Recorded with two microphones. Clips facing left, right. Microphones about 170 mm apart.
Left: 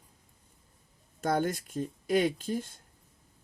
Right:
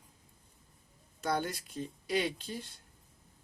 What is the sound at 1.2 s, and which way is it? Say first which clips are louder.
Speech: left 5 dB; 50° left (ahead or behind).